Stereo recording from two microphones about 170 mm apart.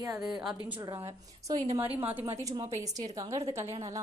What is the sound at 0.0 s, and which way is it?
A woman's voice, 20° right (ahead or behind).